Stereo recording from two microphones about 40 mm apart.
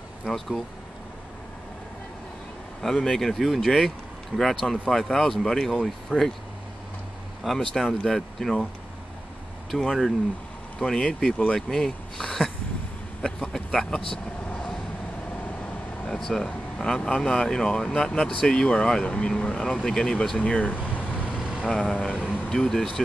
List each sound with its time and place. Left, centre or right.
0.3 s speech: centre
2.8 s speech: centre
7.5 s speech: centre
9.8 s speech: centre
13.5 s vehicle: centre
16.2 s speech: centre
20.4 s speech: left
20.7 s a sound: left
21.3 s vehicle: right
21.8 s speech: left
22.5 s speech: centre